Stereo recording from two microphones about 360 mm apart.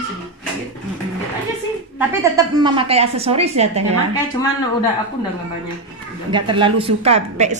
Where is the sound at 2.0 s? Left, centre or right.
Centre.